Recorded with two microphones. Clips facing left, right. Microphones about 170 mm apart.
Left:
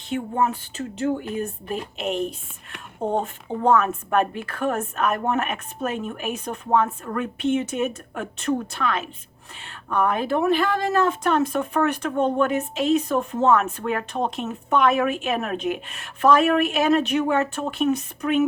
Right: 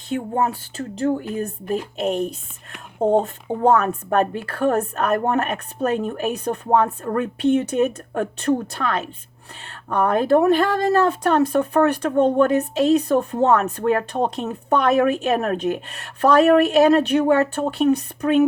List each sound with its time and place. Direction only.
0.3 s speech: 35° right (ahead or behind)
3.6 s speech: 35° right (ahead or behind)